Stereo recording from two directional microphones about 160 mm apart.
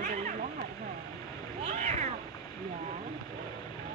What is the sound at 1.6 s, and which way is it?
Cat, 45° right (ahead or behind).